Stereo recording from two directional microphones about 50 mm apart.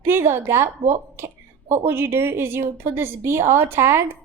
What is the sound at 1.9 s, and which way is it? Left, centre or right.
A woman's voice, right.